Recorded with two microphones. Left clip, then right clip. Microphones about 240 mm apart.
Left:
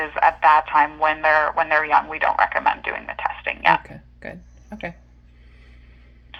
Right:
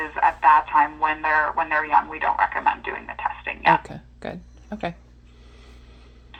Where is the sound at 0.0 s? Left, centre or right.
Left.